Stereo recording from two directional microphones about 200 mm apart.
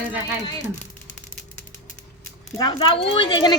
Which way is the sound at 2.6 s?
20° left (ahead or behind).